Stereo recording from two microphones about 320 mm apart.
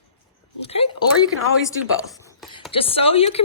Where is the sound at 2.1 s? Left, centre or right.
Centre.